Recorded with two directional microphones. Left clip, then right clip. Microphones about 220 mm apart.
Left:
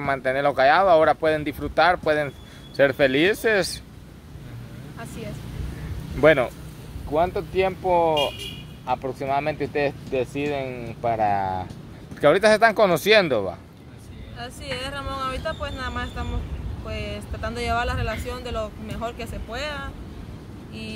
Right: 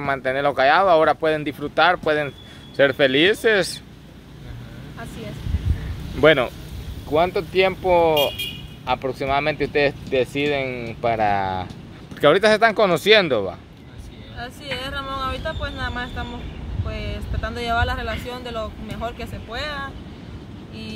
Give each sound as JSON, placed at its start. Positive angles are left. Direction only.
{"t": 0.0, "sound": "speech", "side_deg": -5}
{"t": 6.2, "sound": "speech", "side_deg": -5}